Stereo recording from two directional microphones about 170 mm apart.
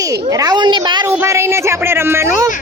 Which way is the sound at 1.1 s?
15° right (ahead or behind).